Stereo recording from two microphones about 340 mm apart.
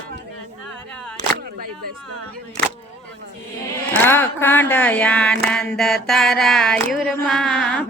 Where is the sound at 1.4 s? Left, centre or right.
Right.